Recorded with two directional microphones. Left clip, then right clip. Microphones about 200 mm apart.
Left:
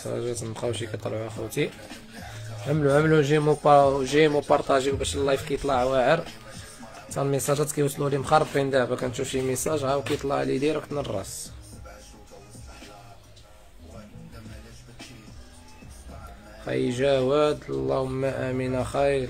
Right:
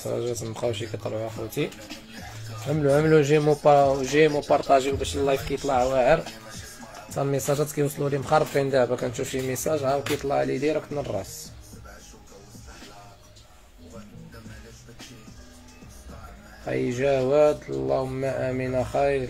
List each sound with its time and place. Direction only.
0.0 s speech: 5° right (ahead or behind)
0.7 s speech: 15° left (ahead or behind)
2.7 s speech: 10° left (ahead or behind)
16.6 s speech: 5° left (ahead or behind)